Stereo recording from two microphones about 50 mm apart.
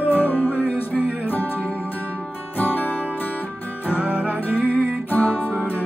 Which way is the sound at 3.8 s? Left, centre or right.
Right.